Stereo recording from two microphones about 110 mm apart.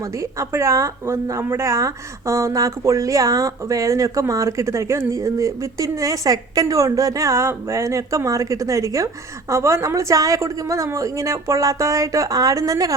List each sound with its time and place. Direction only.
0.2 s speech: 25° right (ahead or behind)